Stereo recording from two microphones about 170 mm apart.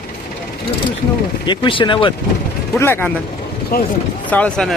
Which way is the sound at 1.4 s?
25° left (ahead or behind).